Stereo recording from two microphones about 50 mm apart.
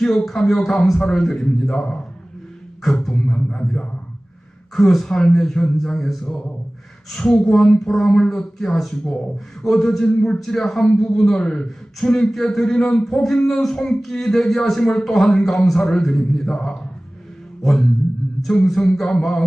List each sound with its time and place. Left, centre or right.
0.0 s a man's voice: centre
4.7 s a man's voice: centre
9.6 s a sound: centre
10.4 s a man's voice: centre
12.8 s speech: centre
13.1 s a man's voice: centre
18.4 s a sound: centre